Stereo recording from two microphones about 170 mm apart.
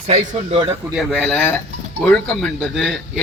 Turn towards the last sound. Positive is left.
turn(degrees=0)  # may be behind; listen again after turning